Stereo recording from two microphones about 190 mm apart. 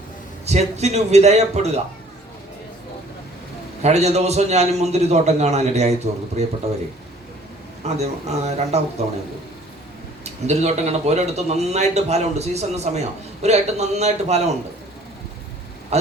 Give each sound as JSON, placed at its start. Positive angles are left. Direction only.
{"t": 0.4, "sound": "speech", "side_deg": -35}
{"t": 3.8, "sound": "speech", "side_deg": -35}
{"t": 7.9, "sound": "speech", "side_deg": -35}
{"t": 10.2, "sound": "speech", "side_deg": -35}
{"t": 15.9, "sound": "speech", "side_deg": -35}